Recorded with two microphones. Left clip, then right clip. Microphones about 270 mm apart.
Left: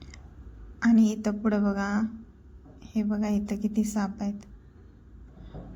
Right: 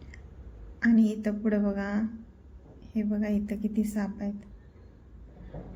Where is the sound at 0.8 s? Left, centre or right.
Centre.